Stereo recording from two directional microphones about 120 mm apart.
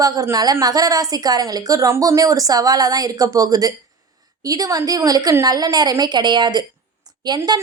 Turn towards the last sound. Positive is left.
turn(degrees=-35)  # may be behind; listen again after turning